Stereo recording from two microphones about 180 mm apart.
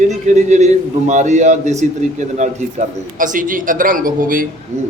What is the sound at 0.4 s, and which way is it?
A man's voice, 40° right (ahead or behind).